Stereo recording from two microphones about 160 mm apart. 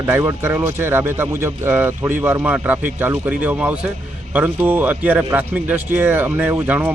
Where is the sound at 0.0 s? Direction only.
15° right (ahead or behind).